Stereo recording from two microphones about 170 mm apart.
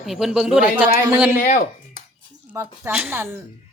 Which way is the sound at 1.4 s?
55° left (ahead or behind).